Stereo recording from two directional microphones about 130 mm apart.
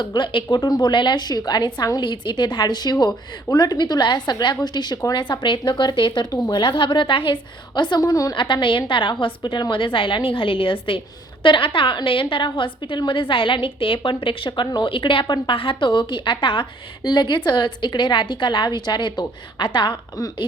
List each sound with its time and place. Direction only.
0.0 s a woman's voice: 35° left (ahead or behind)